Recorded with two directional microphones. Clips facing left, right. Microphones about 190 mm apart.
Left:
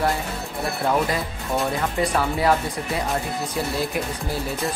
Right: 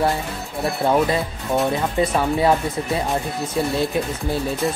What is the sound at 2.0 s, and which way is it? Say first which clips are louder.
Speech: right 4 dB; 25° right (ahead or behind).